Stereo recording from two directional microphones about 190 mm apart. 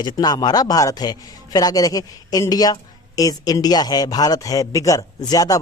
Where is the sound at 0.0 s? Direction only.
20° left (ahead or behind).